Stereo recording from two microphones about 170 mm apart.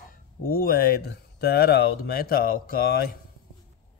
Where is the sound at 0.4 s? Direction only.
60° left (ahead or behind).